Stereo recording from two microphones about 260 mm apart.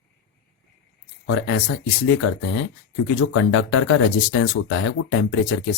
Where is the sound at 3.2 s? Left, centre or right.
Left.